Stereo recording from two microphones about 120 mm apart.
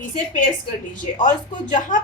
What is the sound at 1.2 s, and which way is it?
Speech, 90° left.